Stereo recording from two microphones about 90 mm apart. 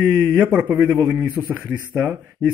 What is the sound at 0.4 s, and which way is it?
A man's voice, 15° right (ahead or behind).